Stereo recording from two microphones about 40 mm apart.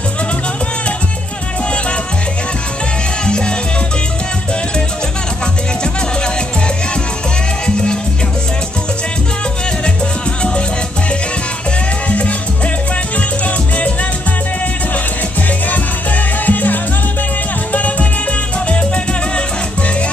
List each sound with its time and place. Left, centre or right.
3.3 s music: left
7.6 s music: left
12.1 s music: left
16.4 s music: left
17.7 s music: left